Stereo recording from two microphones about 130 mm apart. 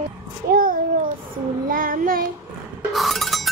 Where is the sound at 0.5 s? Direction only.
90° right.